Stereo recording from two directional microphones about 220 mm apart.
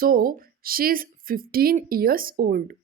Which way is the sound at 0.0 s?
40° right (ahead or behind).